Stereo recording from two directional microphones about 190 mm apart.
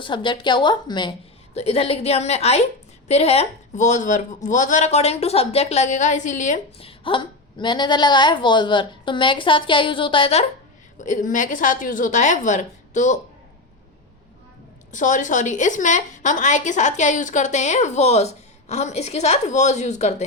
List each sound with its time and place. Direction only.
0.0 s a woman's voice: 25° left (ahead or behind)
11.0 s a woman's voice: 40° left (ahead or behind)
14.9 s a woman's voice: 40° left (ahead or behind)